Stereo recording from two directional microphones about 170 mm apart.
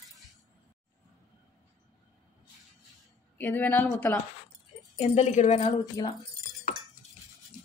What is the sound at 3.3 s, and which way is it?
Speech, 10° left (ahead or behind).